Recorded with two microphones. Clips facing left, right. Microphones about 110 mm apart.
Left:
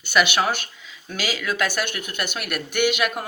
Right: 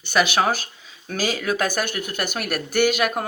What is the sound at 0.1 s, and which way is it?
Speech, 35° right (ahead or behind).